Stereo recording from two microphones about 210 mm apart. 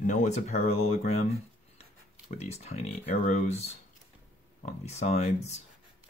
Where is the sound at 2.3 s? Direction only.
30° left (ahead or behind).